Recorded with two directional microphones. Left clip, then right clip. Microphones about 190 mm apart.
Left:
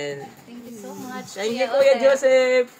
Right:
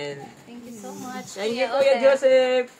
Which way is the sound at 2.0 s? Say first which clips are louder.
Left 1 dB; 15° left (ahead or behind).